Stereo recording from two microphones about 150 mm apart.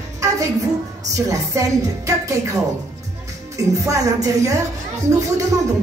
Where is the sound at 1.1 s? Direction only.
20° right (ahead or behind).